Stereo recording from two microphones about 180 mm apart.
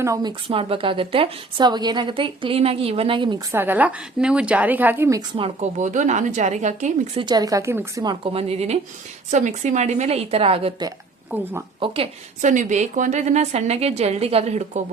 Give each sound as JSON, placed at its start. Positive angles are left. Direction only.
{"t": 0.0, "sound": "a woman's voice", "side_deg": -20}
{"t": 3.5, "sound": "a woman's voice", "side_deg": -10}
{"t": 5.4, "sound": "a woman's voice", "side_deg": -40}
{"t": 7.2, "sound": "a woman's voice", "side_deg": -25}
{"t": 8.2, "sound": "a woman's voice", "side_deg": -35}
{"t": 11.3, "sound": "a woman's voice", "side_deg": -10}
{"t": 11.8, "sound": "a woman's voice", "side_deg": -30}
{"t": 12.4, "sound": "a woman's voice", "side_deg": -45}